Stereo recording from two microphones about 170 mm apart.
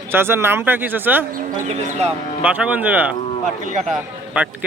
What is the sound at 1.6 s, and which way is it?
Speech, 40° right (ahead or behind).